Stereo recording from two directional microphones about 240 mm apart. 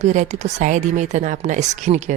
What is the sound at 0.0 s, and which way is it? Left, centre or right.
Speech, right.